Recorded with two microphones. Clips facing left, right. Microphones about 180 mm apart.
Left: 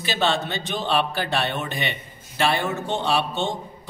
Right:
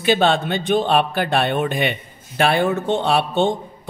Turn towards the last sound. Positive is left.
turn(degrees=-55)  # may be behind; listen again after turning